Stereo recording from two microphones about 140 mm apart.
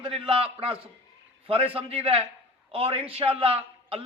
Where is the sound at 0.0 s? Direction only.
40° right (ahead or behind).